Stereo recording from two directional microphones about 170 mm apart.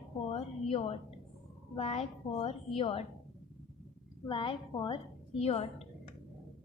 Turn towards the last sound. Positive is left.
turn(degrees=40)  # may be behind; listen again after turning